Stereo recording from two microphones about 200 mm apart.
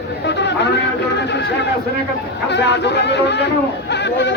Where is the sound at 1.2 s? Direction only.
60° left (ahead or behind).